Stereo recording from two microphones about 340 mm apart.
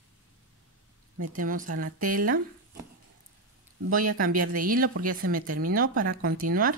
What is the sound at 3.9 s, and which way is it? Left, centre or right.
Speech, right.